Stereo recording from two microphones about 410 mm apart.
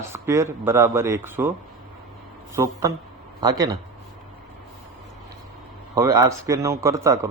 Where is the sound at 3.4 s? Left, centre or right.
Centre.